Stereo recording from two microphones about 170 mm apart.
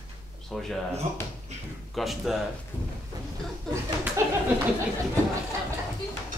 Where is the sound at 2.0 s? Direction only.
Centre (ahead or behind).